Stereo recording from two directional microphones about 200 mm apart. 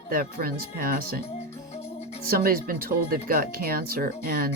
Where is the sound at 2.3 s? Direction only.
45° right (ahead or behind).